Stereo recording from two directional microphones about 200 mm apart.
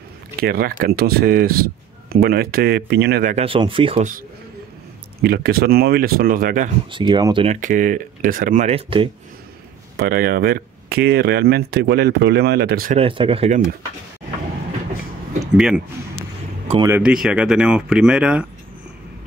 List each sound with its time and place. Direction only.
0.4 s speech: 45° right (ahead or behind)
3.3 s speech: 25° right (ahead or behind)
5.2 s speech: 50° right (ahead or behind)
6.9 s speech: 25° right (ahead or behind)
7.6 s speech: 40° right (ahead or behind)
9.9 s speech: 50° right (ahead or behind)
12.9 s speech: 25° right (ahead or behind)
15.5 s speech: 5° right (ahead or behind)
16.8 s speech: 10° right (ahead or behind)